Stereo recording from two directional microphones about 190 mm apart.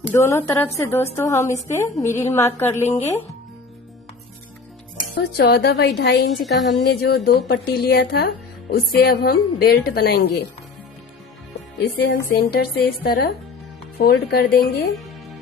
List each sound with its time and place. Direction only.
0.1 s a woman's voice: 15° left (ahead or behind)
5.4 s a woman's voice: 65° left (ahead or behind)
6.2 s a woman's voice: centre (ahead or behind)
6.8 s a woman's voice: 60° left (ahead or behind)
11.8 s a woman's voice: 55° left (ahead or behind)